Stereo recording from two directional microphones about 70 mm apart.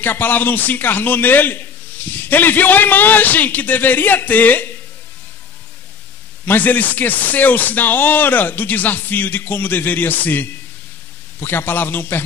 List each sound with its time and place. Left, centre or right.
0.0 s a man's voice: left
6.4 s a man's voice: left